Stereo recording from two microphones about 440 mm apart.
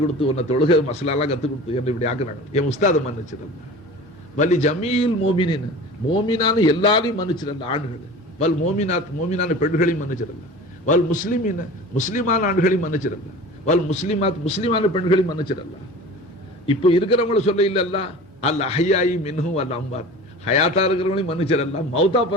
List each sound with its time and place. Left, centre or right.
0.2 s a man's voice: centre
4.4 s a man's voice: centre
16.6 s a man's voice: centre